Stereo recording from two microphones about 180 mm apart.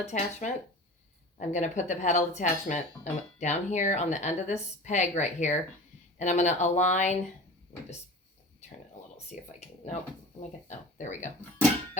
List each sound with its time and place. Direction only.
0.1 s speech: 40° left (ahead or behind)
9.1 s a sound: 40° left (ahead or behind)
10.7 s speech: 40° left (ahead or behind)